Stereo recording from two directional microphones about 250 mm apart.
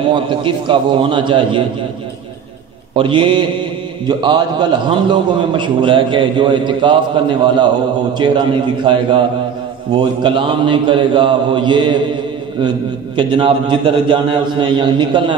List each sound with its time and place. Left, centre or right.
0.1 s a man's voice: centre
2.9 s a man's voice: centre
10.2 s a man's voice: centre